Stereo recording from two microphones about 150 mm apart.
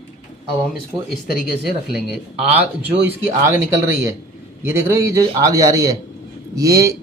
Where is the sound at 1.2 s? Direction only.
80° left.